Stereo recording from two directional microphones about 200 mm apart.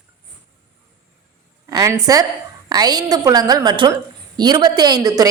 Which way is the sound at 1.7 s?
20° right (ahead or behind).